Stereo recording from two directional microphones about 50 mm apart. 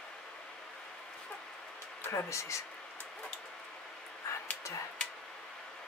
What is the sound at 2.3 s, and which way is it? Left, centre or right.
Speech, left.